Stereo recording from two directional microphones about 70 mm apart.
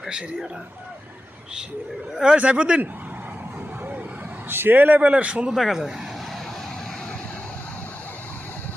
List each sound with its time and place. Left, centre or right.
2.1 s speech: centre
4.4 s a man's voice: right; by 5.5 s centre
5.5 s speech: centre